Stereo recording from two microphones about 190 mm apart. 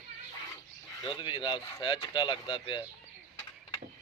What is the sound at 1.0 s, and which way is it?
Speech, 25° left (ahead or behind).